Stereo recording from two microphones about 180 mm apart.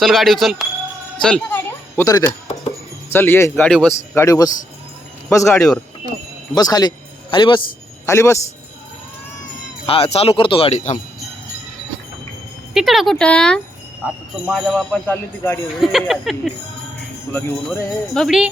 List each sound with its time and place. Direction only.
0.0 s a man's voice: centre (ahead or behind)
4.1 s a man's voice: 15° left (ahead or behind)
8.0 s a man's voice: 15° left (ahead or behind)
9.8 s speech: 35° left (ahead or behind)
12.7 s speech: centre (ahead or behind)
15.7 s speech: centre (ahead or behind)
17.3 s speech: 10° left (ahead or behind)